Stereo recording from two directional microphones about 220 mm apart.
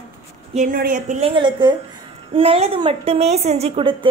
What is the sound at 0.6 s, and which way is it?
A woman's voice, 40° right (ahead or behind).